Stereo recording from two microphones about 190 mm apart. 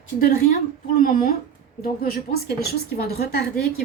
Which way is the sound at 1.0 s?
45° left (ahead or behind).